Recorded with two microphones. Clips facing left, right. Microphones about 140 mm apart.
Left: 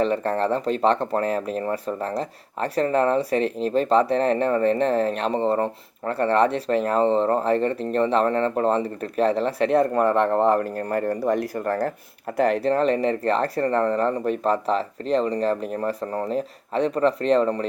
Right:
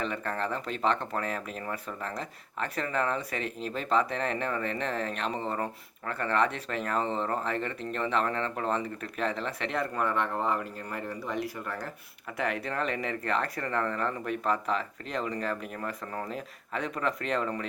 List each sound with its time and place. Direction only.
0.0 s speech: 35° left (ahead or behind)
10.3 s speech: 50° left (ahead or behind)
12.4 s speech: 35° left (ahead or behind)